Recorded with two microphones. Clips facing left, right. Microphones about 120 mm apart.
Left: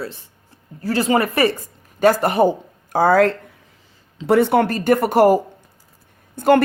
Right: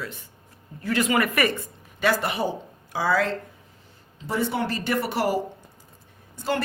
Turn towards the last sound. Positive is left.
turn(degrees=55)  # may be behind; listen again after turning